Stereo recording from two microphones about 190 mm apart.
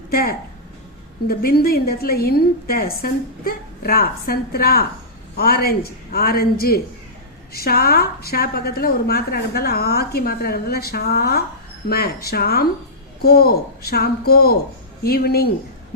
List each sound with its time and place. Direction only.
0.1 s a woman's voice: 50° left (ahead or behind)